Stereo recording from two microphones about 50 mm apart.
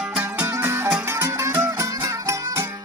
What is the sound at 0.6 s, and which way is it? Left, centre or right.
Music, right.